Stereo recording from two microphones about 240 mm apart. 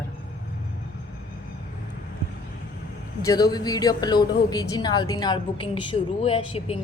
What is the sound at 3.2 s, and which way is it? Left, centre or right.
A woman's voice, centre.